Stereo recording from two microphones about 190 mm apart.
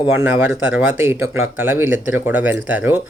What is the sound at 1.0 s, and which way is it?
Speech, 15° right (ahead or behind).